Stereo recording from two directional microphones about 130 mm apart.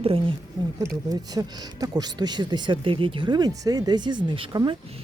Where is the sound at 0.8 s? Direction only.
30° right (ahead or behind).